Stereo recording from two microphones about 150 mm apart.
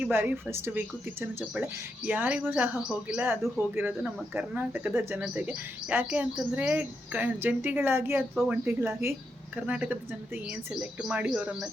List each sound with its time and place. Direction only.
0.0 s speech: 15° right (ahead or behind)